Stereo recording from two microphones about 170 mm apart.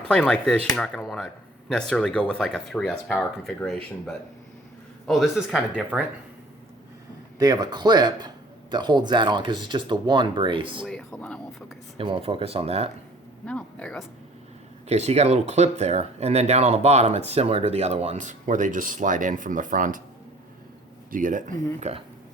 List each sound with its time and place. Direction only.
0.1 s speech: 5° left (ahead or behind)
5.0 s speech: centre (ahead or behind)
7.3 s speech: 25° right (ahead or behind)
10.8 s speech: 5° left (ahead or behind)
11.9 s speech: 30° right (ahead or behind)
13.4 s speech: 5° left (ahead or behind)
14.8 s speech: 40° right (ahead or behind)
21.1 s speech: 50° right (ahead or behind)